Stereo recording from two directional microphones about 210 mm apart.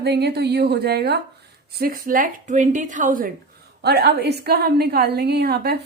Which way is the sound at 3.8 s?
50° right (ahead or behind).